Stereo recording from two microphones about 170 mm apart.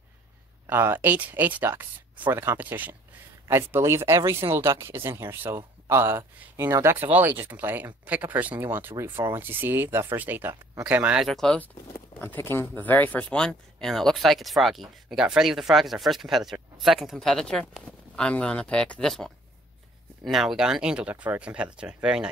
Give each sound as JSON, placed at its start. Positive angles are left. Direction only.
{"t": 0.7, "sound": "speech", "side_deg": -10}